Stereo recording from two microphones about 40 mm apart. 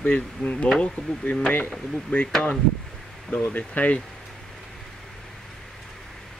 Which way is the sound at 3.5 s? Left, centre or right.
Left.